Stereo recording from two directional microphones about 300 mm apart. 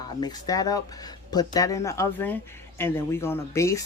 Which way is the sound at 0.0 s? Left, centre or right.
Centre.